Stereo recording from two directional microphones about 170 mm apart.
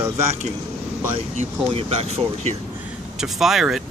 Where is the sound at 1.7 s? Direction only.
40° right (ahead or behind).